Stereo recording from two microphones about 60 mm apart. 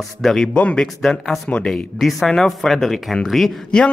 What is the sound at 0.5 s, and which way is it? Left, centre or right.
Speech, left.